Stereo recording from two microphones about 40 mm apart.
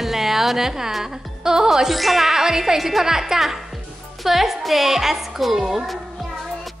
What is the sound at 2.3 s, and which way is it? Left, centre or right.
Speech, centre.